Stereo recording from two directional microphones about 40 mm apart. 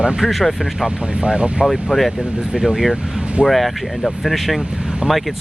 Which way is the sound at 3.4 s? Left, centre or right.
Centre.